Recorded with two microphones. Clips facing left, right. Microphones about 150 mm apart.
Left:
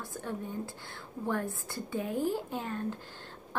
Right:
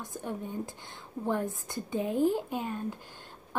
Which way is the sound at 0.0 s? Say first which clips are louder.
Right 1 dB; 15° right (ahead or behind).